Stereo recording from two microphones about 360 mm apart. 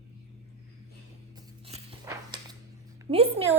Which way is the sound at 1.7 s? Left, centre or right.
Centre.